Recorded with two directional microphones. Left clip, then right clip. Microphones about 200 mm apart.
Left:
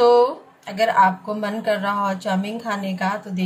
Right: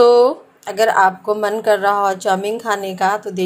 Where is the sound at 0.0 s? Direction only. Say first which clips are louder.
Right 4 dB; 25° right (ahead or behind).